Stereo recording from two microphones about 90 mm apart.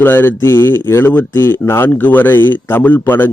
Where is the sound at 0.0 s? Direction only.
25° left (ahead or behind).